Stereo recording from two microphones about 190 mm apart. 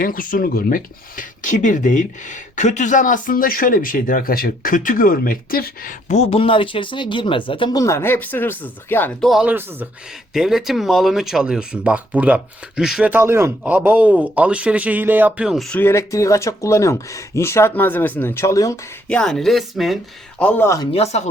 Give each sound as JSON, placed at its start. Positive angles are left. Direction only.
{"t": 0.0, "sound": "speech", "side_deg": 45}
{"t": 9.3, "sound": "speech", "side_deg": -5}
{"t": 19.0, "sound": "speech", "side_deg": 5}
{"t": 20.9, "sound": "speech", "side_deg": 35}